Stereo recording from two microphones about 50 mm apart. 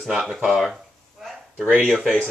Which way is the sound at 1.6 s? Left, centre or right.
Right.